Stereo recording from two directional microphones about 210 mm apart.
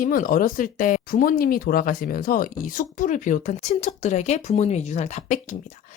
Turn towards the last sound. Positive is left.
turn(degrees=35)  # may be behind; listen again after turning